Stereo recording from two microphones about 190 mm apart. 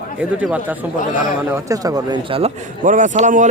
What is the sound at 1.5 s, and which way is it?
A man's voice, 20° right (ahead or behind).